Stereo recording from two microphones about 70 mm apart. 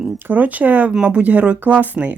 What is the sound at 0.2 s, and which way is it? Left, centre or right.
A woman's voice, right.